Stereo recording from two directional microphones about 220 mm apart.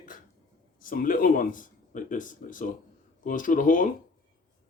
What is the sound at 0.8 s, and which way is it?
Speech, 40° left (ahead or behind).